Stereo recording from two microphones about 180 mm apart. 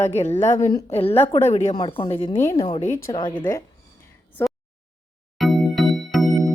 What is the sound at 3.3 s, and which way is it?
Speech, 15° left (ahead or behind).